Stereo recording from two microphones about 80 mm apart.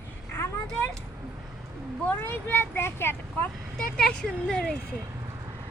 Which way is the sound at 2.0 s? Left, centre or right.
Left.